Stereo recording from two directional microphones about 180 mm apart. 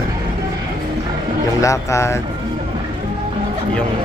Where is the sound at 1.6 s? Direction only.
15° left (ahead or behind).